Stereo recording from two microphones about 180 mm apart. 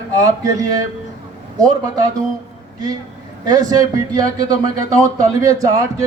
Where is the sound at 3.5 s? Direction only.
20° right (ahead or behind).